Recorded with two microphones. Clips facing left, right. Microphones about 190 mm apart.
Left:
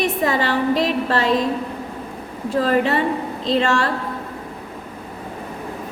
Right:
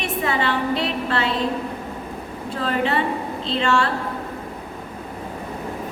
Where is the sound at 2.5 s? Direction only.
40° left (ahead or behind).